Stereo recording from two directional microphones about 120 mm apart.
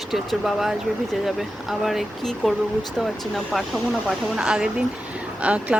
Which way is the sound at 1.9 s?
Centre (ahead or behind).